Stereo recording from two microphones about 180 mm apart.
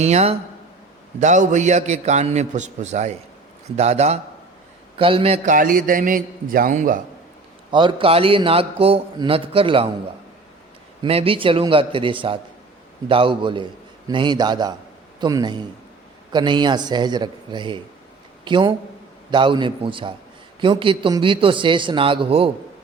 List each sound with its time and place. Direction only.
0.0 s a man's voice: 35° right (ahead or behind)
5.5 s a man's voice: 50° right (ahead or behind)
7.7 s a man's voice: 25° right (ahead or behind)
11.0 s a man's voice: 30° right (ahead or behind)